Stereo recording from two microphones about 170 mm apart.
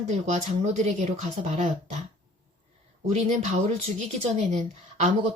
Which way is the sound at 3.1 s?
40° right (ahead or behind).